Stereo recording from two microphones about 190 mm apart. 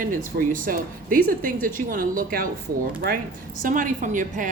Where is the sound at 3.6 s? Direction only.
45° right (ahead or behind).